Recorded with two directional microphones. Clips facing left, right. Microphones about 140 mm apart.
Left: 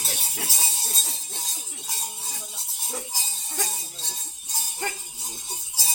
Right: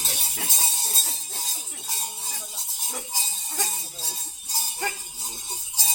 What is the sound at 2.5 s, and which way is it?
Music, centre (ahead or behind).